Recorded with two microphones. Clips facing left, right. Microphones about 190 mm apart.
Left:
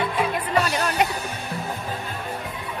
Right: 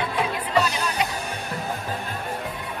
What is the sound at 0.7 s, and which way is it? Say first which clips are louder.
Music: left 3 dB; 55° left (ahead or behind).